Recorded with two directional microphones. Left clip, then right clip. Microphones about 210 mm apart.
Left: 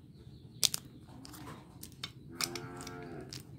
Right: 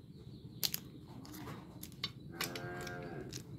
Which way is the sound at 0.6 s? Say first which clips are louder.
Left 7 dB; 20° left (ahead or behind).